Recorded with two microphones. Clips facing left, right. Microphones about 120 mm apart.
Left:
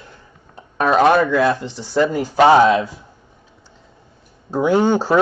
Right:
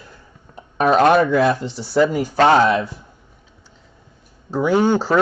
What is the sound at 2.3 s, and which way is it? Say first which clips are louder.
Speech: left 4 dB; 15° left (ahead or behind).